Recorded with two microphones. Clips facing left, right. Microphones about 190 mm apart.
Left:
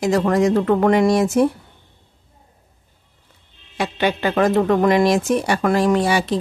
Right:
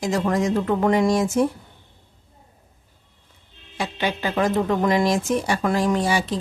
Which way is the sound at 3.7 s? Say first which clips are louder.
Left 5 dB; 65° left (ahead or behind).